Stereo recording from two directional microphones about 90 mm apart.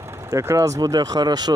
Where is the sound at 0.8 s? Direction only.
45° right (ahead or behind).